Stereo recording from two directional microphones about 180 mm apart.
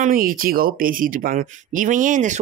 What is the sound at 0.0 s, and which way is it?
Speech, 50° right (ahead or behind).